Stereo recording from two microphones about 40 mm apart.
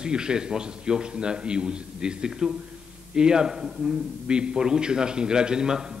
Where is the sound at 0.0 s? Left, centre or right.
Right.